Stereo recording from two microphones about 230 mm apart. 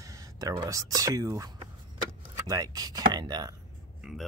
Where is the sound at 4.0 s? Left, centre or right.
Centre.